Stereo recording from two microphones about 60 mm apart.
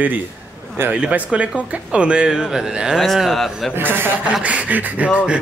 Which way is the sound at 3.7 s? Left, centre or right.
Right.